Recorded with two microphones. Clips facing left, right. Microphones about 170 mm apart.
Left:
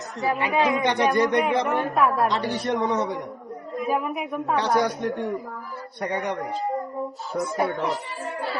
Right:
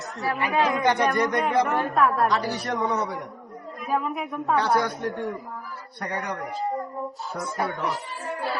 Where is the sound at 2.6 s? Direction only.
25° left (ahead or behind).